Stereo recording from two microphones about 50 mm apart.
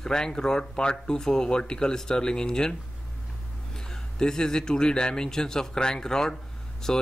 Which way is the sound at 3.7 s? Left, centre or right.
Centre.